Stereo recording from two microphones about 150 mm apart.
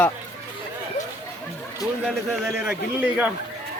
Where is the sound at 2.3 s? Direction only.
10° right (ahead or behind).